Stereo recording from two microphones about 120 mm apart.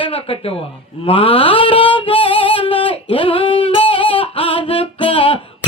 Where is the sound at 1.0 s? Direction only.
50° left (ahead or behind).